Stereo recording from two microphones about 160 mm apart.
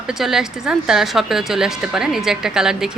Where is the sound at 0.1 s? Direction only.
Centre (ahead or behind).